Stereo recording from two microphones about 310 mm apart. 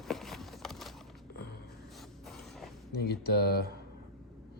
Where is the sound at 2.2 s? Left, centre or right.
Centre.